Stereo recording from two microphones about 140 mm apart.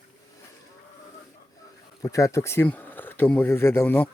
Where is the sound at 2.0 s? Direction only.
25° left (ahead or behind).